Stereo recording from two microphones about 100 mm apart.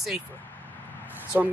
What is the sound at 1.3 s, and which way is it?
Speech, 15° right (ahead or behind).